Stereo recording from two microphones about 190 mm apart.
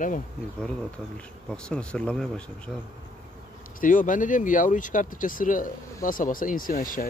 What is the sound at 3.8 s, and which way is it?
Speech, 45° left (ahead or behind).